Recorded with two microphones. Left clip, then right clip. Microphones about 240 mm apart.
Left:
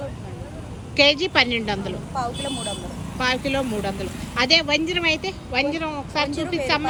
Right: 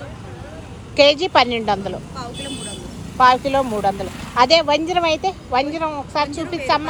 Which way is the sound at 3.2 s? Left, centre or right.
Centre.